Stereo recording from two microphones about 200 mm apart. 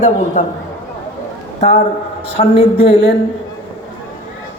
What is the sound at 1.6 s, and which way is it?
A man's voice, 35° left (ahead or behind).